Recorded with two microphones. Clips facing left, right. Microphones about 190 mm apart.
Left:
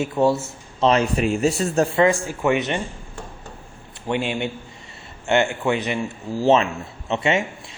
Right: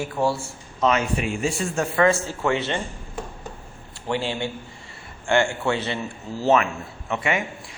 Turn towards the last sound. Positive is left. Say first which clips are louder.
# left 4 dB
turn(degrees=25)  # may be behind; listen again after turning